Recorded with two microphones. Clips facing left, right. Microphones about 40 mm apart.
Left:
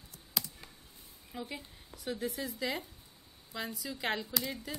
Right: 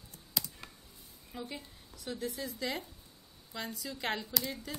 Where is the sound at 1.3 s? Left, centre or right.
Centre.